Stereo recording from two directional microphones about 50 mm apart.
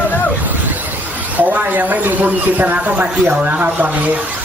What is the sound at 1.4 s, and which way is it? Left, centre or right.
A man's voice, right.